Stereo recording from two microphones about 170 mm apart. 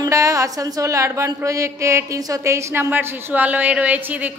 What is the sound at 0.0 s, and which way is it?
A woman's voice, 20° right (ahead or behind).